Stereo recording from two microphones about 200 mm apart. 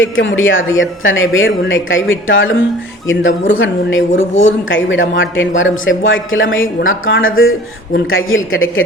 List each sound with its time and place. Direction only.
0.0 s speech: 70° left (ahead or behind); by 8.8 s 90° left